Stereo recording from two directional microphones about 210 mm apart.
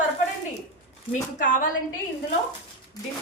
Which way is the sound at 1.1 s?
40° left (ahead or behind).